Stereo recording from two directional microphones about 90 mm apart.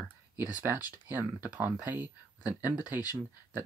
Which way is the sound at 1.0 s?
20° right (ahead or behind).